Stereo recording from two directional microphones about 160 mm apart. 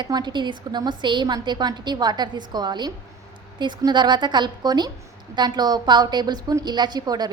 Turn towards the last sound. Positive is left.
turn(degrees=-25)  # may be behind; listen again after turning